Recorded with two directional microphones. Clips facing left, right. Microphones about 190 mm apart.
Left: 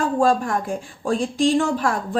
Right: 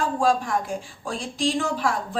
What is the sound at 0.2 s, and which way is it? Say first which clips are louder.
A woman's voice: left 3 dB; 55° left (ahead or behind).